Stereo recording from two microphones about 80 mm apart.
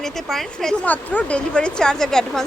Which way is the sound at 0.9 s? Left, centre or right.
Centre.